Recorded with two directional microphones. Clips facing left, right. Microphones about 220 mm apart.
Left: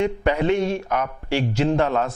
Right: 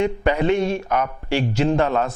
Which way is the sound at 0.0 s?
15° right (ahead or behind).